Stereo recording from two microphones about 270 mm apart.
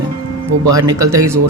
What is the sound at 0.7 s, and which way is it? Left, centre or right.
Speech, centre.